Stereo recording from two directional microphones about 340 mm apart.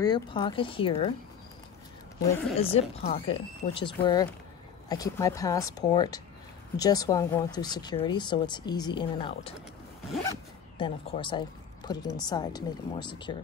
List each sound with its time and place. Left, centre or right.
0.0 s speech: centre
2.5 s speech: centre